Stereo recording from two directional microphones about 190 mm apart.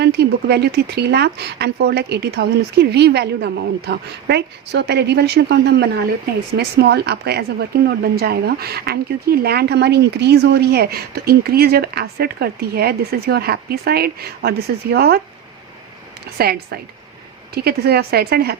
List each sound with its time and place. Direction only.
0.0 s a woman's voice: 60° right (ahead or behind)
16.4 s a woman's voice: 55° right (ahead or behind)